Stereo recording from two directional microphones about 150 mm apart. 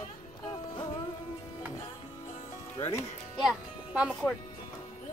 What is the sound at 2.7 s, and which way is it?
Speech, 20° left (ahead or behind).